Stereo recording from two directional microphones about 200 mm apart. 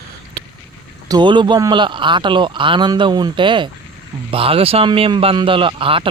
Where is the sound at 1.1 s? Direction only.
25° right (ahead or behind).